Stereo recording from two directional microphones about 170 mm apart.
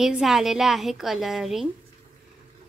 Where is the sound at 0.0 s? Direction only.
5° right (ahead or behind).